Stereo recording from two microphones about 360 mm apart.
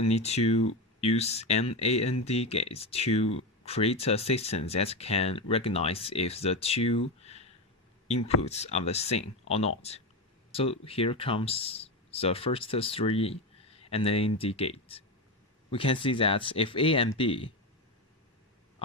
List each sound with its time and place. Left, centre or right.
0.0 s speech: centre